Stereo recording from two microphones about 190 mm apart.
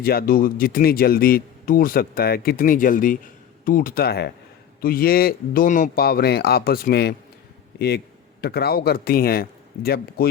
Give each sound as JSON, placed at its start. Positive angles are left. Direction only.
{"t": 0.0, "sound": "a man's voice", "side_deg": 50}